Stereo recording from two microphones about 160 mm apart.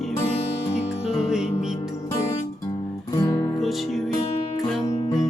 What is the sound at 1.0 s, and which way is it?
Music, 5° right (ahead or behind).